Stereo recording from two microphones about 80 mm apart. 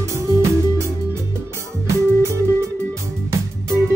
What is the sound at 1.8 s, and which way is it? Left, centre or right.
Music, right.